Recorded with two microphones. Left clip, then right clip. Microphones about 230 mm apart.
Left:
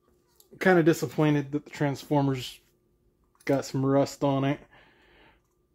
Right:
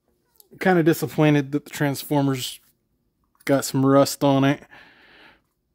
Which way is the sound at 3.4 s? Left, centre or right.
Right.